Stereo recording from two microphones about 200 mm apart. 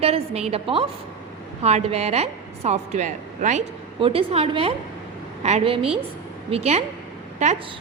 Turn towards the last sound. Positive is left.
turn(degrees=-35)  # may be behind; listen again after turning